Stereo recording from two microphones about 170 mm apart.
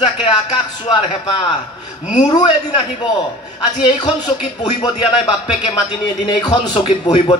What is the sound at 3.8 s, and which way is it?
A man's voice, 30° left (ahead or behind).